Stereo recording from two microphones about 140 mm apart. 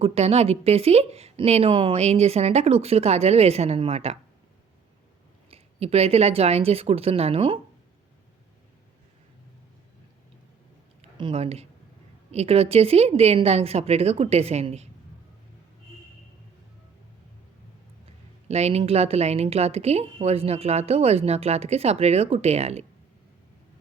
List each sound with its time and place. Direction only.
0.0 s speech: 45° right (ahead or behind)
5.5 s speech: 45° right (ahead or behind)
11.2 s speech: 40° right (ahead or behind)
18.0 s speech: 50° right (ahead or behind)